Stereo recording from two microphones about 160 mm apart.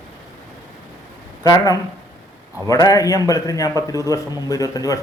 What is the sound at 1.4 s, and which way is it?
Speech, 25° left (ahead or behind).